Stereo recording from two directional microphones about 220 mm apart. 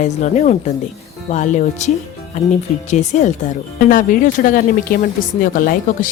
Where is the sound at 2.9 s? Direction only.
35° left (ahead or behind).